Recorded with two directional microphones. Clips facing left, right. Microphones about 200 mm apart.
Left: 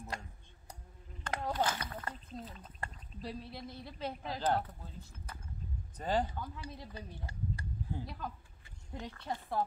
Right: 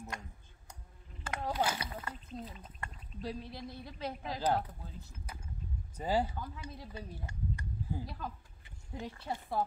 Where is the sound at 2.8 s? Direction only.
35° left (ahead or behind).